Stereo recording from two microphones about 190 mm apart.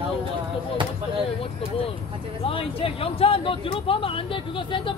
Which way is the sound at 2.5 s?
30° left (ahead or behind).